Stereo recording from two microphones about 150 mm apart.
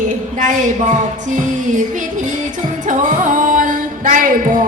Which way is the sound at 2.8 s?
60° right (ahead or behind).